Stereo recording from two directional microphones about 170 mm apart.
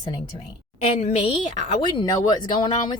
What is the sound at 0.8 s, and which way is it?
Speech, 40° left (ahead or behind).